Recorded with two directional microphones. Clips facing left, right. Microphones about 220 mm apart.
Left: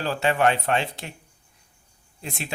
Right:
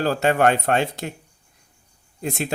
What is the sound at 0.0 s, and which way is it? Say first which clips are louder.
Speech: right 4 dB; 45° right (ahead or behind).